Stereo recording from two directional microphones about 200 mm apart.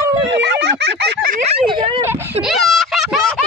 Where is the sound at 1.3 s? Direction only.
30° right (ahead or behind).